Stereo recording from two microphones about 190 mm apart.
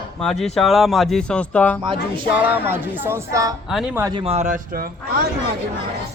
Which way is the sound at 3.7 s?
5° right (ahead or behind).